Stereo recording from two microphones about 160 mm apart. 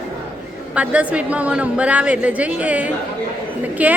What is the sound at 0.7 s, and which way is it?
A woman's voice, 10° right (ahead or behind).